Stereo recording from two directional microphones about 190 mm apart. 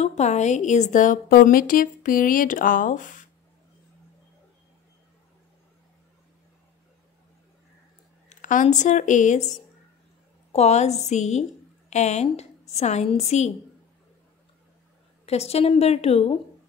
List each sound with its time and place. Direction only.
0.0 s a woman's voice: 35° left (ahead or behind)
8.3 s a woman's voice: 45° left (ahead or behind)
15.2 s a woman's voice: 35° left (ahead or behind)